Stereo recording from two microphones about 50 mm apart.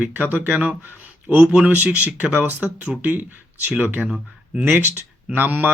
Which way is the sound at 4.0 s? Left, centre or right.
Centre.